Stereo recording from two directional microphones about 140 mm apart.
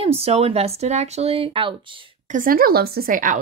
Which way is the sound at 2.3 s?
80° right.